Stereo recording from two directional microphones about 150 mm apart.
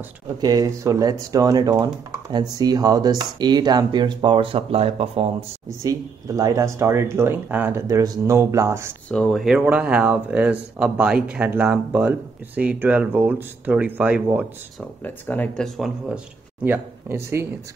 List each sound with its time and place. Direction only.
0.4 s speech: 25° right (ahead or behind); by 5.3 s 40° right (ahead or behind)
5.9 s speech: 25° right (ahead or behind)
9.1 s speech: centre (ahead or behind)
15.0 s speech: 10° left (ahead or behind)
16.6 s speech: 15° right (ahead or behind)